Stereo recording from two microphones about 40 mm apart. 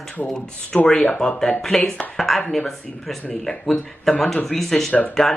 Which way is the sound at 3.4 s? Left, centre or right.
Centre.